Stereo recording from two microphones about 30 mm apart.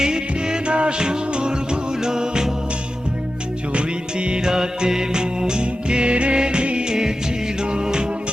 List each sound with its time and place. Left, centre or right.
0.0 s music: right
3.8 s music: right
4.4 s music: right